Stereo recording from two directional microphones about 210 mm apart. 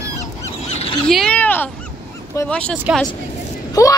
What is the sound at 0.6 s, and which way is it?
Goose, 30° left (ahead or behind).